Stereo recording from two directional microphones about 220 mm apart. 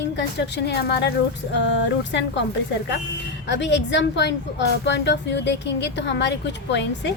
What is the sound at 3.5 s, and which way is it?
A woman's voice, 55° left (ahead or behind).